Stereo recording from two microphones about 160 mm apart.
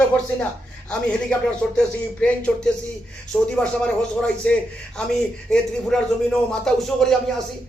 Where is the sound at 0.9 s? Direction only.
5° left (ahead or behind).